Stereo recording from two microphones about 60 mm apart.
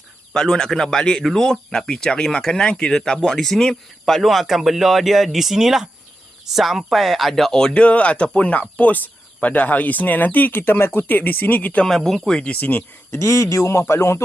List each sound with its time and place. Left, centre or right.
0.3 s speech: centre
11.9 s speech: centre
12.5 s speech: left
13.1 s a man's voice: left